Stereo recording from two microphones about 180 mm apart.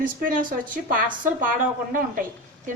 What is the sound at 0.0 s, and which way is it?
A woman's voice, 50° right (ahead or behind).